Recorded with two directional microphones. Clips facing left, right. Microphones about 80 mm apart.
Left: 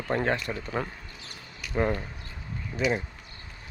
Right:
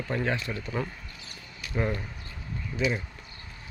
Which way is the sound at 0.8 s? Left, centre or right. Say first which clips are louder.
Left 1 dB; left.